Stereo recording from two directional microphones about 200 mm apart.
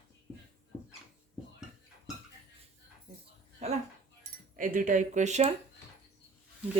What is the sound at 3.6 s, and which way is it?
Speech, 35° right (ahead or behind).